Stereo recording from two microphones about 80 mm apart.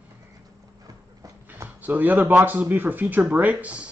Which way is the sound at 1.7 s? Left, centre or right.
Right.